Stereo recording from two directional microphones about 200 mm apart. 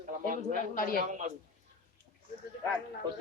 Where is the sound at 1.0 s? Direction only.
40° right (ahead or behind).